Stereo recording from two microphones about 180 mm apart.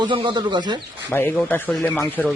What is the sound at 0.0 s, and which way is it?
Speech, 25° right (ahead or behind).